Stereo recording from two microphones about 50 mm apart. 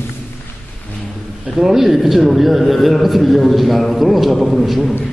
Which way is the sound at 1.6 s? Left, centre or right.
Centre.